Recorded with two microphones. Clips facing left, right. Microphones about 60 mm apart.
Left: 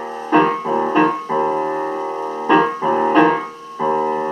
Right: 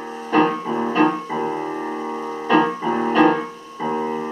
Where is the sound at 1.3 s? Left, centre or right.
Left.